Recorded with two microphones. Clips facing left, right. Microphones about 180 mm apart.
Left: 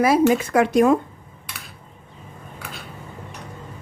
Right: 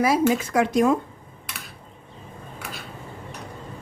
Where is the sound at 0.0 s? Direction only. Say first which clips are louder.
Left 3 dB; 60° left (ahead or behind).